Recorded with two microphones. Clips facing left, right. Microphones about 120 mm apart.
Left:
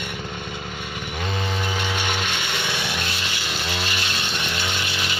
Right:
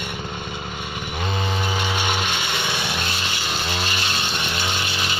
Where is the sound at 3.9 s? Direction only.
25° right (ahead or behind).